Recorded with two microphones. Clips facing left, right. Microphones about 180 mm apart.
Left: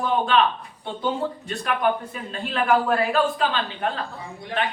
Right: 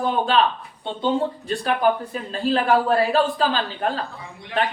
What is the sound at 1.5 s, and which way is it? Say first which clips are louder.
A man's voice: right 3 dB; 35° right (ahead or behind).